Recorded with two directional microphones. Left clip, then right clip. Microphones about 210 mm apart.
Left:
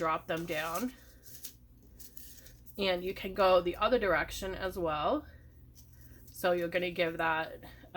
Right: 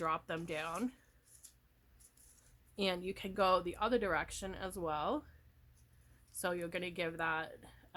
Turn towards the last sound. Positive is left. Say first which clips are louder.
# left 6 dB
turn(degrees=-45)  # may be behind; listen again after turning